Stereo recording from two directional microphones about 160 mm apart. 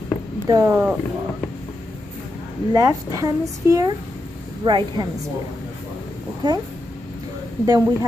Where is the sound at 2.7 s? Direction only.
20° right (ahead or behind).